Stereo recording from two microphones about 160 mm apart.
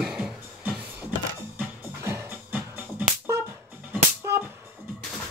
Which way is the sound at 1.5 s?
15° right (ahead or behind).